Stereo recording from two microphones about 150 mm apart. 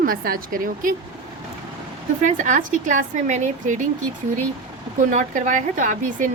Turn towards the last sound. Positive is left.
turn(degrees=-60)  # may be behind; listen again after turning